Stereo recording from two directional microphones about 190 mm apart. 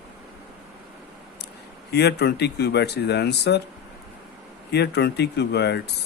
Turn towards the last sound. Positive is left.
turn(degrees=60)  # may be behind; listen again after turning